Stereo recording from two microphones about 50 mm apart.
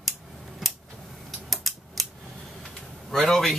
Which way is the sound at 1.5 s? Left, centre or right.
Centre.